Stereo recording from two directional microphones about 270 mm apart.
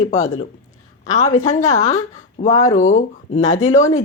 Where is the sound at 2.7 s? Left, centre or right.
Left.